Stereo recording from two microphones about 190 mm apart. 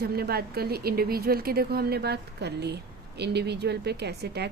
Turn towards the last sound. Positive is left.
turn(degrees=-60)  # may be behind; listen again after turning